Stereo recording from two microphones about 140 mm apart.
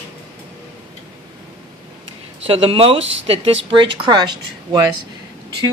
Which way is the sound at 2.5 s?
40° right (ahead or behind).